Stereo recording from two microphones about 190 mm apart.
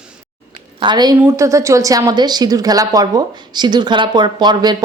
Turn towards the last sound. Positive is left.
turn(degrees=-20)  # may be behind; listen again after turning